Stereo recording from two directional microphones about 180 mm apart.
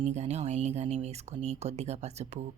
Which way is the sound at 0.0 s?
40° right (ahead or behind).